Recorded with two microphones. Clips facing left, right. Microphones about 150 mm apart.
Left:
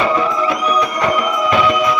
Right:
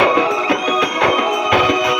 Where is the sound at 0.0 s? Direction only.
80° right.